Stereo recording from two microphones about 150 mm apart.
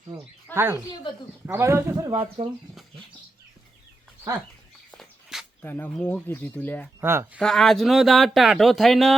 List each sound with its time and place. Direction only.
0.5 s speech: 15° right (ahead or behind)
1.1 s speech: 35° left (ahead or behind)
1.5 s a man's voice: 15° right (ahead or behind)
2.0 s speech: 40° right (ahead or behind)
4.9 s bird: centre (ahead or behind)
5.6 s speech: 10° left (ahead or behind)
7.0 s a man's voice: 15° right (ahead or behind)
7.3 s speech: 5° left (ahead or behind)